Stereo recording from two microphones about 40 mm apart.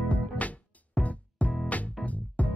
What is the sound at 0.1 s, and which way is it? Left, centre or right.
Music, left.